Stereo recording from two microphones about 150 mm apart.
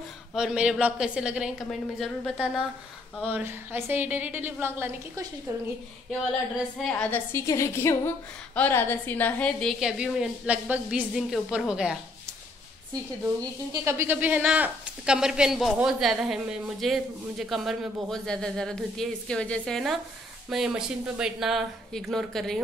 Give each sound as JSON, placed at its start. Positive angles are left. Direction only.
{"t": 0.3, "sound": "speech", "side_deg": -5}
{"t": 3.2, "sound": "a woman's voice", "side_deg": -10}
{"t": 6.8, "sound": "a woman's voice", "side_deg": 5}
{"t": 13.4, "sound": "a woman's voice", "side_deg": -20}